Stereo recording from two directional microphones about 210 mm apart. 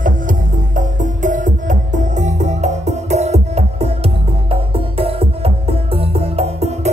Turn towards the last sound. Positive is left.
turn(degrees=-30)  # may be behind; listen again after turning